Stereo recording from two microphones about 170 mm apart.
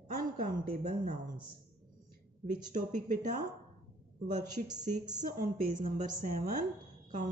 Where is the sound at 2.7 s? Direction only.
50° right (ahead or behind).